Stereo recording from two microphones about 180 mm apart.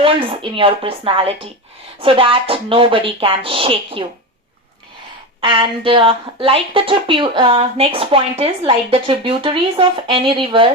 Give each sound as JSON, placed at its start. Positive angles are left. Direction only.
{"t": 0.0, "sound": "a woman's voice", "side_deg": -30}
{"t": 5.4, "sound": "a woman's voice", "side_deg": -30}